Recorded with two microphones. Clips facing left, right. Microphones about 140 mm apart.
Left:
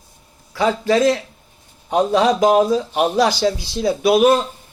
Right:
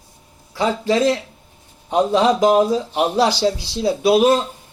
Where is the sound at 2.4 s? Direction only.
10° left (ahead or behind).